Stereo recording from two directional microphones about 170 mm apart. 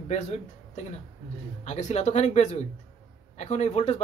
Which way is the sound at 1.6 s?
40° left (ahead or behind).